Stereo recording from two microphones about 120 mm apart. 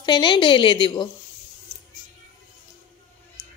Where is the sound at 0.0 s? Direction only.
40° left (ahead or behind).